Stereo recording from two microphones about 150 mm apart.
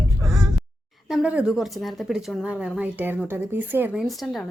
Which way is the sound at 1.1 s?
5° right (ahead or behind).